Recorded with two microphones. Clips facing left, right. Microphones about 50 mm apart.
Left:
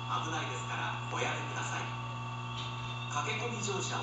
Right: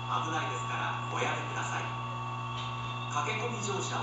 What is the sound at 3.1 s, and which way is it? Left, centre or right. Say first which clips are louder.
Speech: right 2 dB; centre.